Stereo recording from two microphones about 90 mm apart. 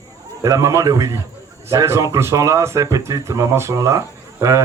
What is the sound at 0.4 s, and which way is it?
Speech, 35° right (ahead or behind).